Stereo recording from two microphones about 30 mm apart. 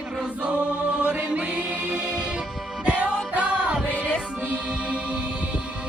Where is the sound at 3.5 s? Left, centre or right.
Right.